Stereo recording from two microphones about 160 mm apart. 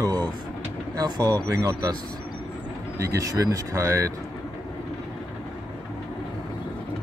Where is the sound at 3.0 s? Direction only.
20° right (ahead or behind).